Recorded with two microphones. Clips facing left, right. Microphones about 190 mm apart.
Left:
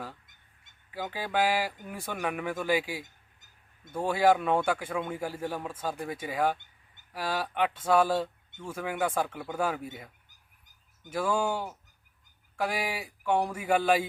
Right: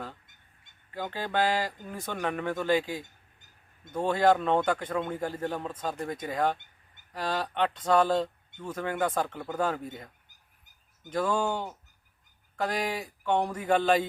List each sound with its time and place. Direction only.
0.9 s a man's voice: 5° left (ahead or behind)
11.1 s a man's voice: 10° left (ahead or behind)